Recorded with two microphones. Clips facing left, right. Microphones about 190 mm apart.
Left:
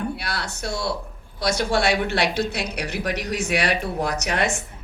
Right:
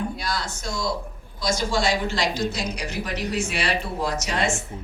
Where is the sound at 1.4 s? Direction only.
65° left (ahead or behind).